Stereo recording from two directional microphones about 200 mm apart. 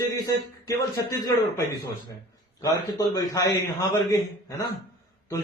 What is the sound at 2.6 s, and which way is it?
Speech, 20° left (ahead or behind).